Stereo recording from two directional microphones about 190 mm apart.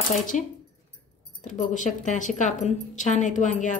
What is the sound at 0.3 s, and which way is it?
A woman's voice, 40° left (ahead or behind).